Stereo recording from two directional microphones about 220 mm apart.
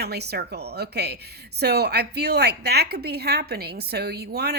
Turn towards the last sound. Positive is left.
turn(degrees=-45)  # may be behind; listen again after turning